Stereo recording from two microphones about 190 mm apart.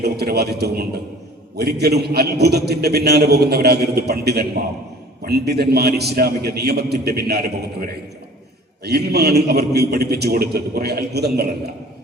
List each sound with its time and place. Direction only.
0.0 s a man's voice: 55° right (ahead or behind)